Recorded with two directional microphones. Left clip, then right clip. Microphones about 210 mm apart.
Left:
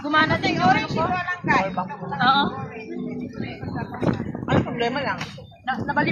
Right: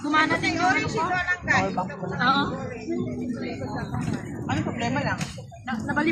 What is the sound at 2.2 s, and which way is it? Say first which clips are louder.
Speech: left 4 dB; 20° left (ahead or behind).